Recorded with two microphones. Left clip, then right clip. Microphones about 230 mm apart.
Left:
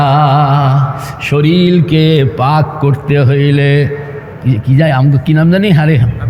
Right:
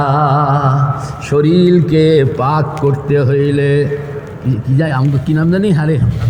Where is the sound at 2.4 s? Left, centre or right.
Left.